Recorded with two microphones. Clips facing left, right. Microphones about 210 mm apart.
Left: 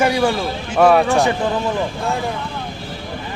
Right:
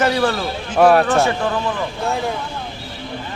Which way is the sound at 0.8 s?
5° right (ahead or behind).